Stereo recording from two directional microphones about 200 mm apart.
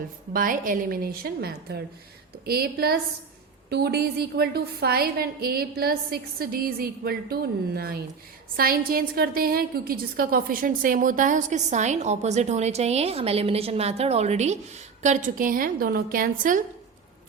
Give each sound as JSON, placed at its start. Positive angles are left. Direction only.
{"t": 0.3, "sound": "a woman's voice", "side_deg": -45}